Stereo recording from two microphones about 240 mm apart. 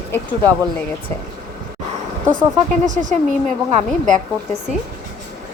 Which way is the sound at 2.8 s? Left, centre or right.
Right.